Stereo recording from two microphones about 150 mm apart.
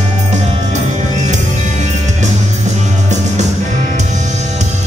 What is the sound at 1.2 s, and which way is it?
Music, 50° right (ahead or behind).